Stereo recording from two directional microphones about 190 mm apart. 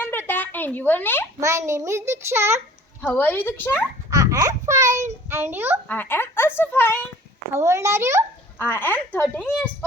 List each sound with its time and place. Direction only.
0.0 s a sound: 10° left (ahead or behind)
1.4 s a child's voice: 15° right (ahead or behind)
3.0 s speech: 10° left (ahead or behind)
4.1 s a child's voice: 15° right (ahead or behind)
5.9 s speech: 10° left (ahead or behind)
7.5 s a child's voice: 15° right (ahead or behind)
8.5 s speech: 10° left (ahead or behind)